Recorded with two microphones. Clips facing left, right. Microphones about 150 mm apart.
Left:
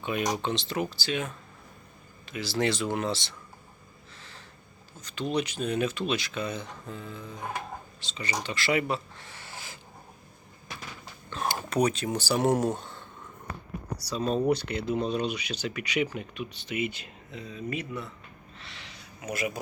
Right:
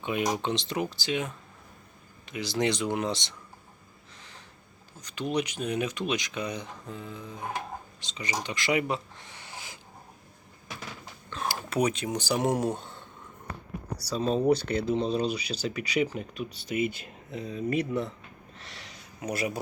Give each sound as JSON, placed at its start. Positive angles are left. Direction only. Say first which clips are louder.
{"t": 0.3, "sound": "speech", "louder": "even", "side_deg": -20}
{"t": 4.2, "sound": "a sound", "louder": "even", "side_deg": -15}
{"t": 4.9, "sound": "speech", "louder": "even", "side_deg": -10}
{"t": 11.5, "sound": "speech", "louder": "left 1 dB", "side_deg": -5}
{"t": 14.2, "sound": "speech", "louder": "right 1 dB", "side_deg": 0}
{"t": 14.7, "sound": "speech", "louder": "right 2 dB", "side_deg": -40}
{"t": 18.6, "sound": "a sound", "louder": "even", "side_deg": -45}